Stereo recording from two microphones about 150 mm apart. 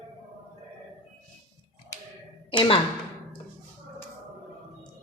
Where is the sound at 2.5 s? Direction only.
35° left (ahead or behind).